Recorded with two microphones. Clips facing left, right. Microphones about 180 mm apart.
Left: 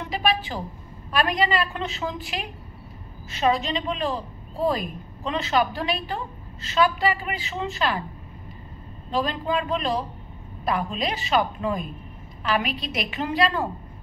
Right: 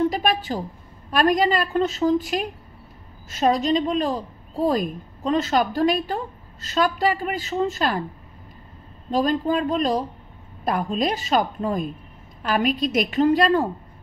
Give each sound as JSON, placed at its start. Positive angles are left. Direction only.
{"t": 0.1, "sound": "a woman's voice", "side_deg": -45}
{"t": 9.1, "sound": "a woman's voice", "side_deg": -45}